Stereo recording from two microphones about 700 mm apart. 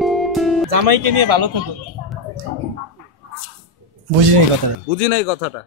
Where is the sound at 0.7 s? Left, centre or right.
Right.